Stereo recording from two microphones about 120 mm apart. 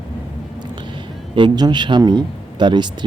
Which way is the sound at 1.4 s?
35° right (ahead or behind).